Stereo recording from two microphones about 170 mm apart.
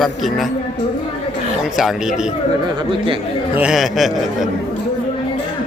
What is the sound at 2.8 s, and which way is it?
Speech, 30° right (ahead or behind).